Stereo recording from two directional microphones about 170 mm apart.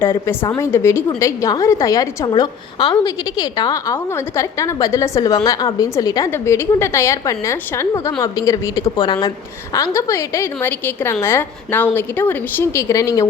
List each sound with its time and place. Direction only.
0.0 s a woman's voice: 15° left (ahead or behind)